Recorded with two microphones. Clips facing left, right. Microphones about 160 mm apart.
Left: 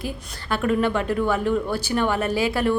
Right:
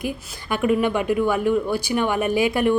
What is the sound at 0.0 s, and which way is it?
Speech, 15° right (ahead or behind).